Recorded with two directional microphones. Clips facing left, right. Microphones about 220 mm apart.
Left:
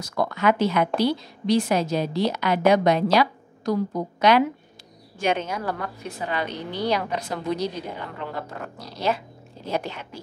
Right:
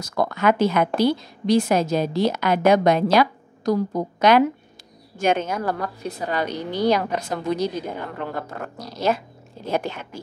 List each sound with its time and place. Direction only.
0.0 s a woman's voice: 45° right (ahead or behind)